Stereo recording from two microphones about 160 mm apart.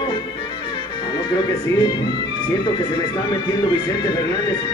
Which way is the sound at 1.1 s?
30° left (ahead or behind).